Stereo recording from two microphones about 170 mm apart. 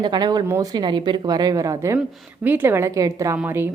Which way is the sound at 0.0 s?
25° right (ahead or behind).